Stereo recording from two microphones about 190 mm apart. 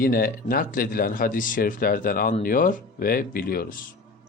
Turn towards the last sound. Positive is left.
turn(degrees=50)  # may be behind; listen again after turning